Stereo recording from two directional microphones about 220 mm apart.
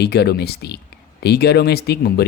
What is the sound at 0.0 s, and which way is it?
Speech, 45° left (ahead or behind).